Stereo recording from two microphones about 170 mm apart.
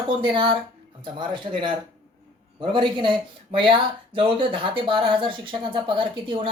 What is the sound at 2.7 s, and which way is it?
Speech, 30° right (ahead or behind).